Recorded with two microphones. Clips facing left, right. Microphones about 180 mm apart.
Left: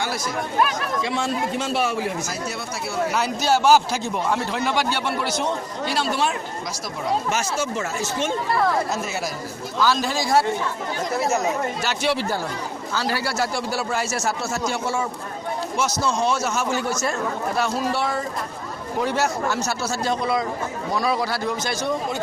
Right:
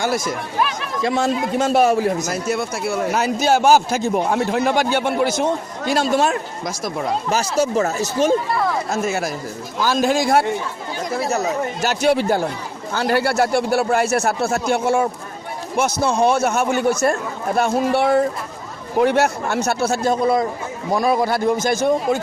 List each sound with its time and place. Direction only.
1.0 s a man's voice: 45° right (ahead or behind)
2.3 s a man's voice: 55° right (ahead or behind)
7.3 s speech: 35° right (ahead or behind)
8.9 s a man's voice: 50° right (ahead or behind)
11.8 s a man's voice: 45° right (ahead or behind)